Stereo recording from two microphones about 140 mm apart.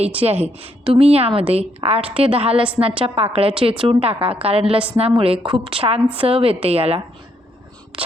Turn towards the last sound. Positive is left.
turn(degrees=-45)  # may be behind; listen again after turning